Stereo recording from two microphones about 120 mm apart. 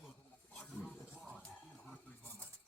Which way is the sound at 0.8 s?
5° right (ahead or behind).